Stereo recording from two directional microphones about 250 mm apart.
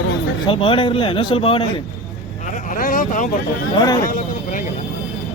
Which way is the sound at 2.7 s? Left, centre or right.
Left.